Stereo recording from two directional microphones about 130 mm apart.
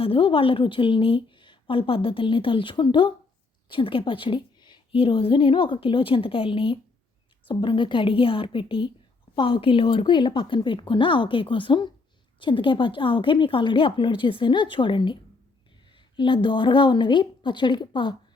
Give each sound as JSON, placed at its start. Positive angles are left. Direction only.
{"t": 0.0, "sound": "a woman's voice", "side_deg": 45}